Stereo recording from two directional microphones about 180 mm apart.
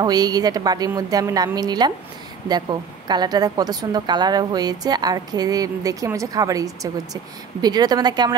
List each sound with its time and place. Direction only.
0.0 s a woman's voice: 20° right (ahead or behind)